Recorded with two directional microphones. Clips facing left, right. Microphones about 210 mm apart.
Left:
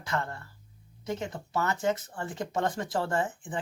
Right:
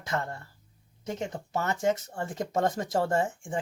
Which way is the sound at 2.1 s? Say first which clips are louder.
Right 2 dB; 45° right (ahead or behind).